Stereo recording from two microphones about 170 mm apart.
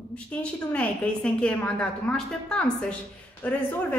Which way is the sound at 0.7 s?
5° left (ahead or behind).